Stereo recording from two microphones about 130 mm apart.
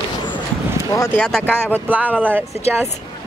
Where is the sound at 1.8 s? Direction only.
10° right (ahead or behind).